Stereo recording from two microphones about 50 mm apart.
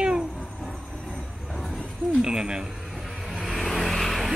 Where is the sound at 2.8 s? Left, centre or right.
Centre.